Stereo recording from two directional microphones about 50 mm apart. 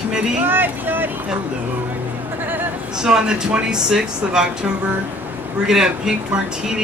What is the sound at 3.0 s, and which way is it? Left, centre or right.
Speech, centre.